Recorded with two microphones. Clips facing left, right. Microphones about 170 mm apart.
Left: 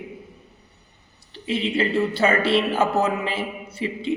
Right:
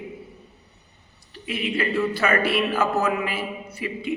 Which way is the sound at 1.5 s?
30° left (ahead or behind).